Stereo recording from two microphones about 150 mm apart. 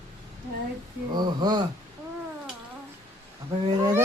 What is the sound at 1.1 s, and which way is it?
Speech, 30° right (ahead or behind).